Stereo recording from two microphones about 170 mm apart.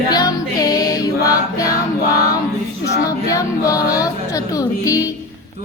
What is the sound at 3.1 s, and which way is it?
Music, 20° left (ahead or behind).